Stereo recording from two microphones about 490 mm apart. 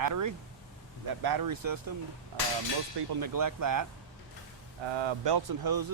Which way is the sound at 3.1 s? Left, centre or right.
Right.